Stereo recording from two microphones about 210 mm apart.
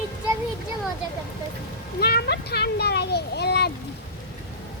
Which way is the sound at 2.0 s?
50° left (ahead or behind).